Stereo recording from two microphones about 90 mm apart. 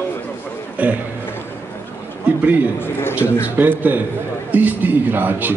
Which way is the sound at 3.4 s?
20° right (ahead or behind).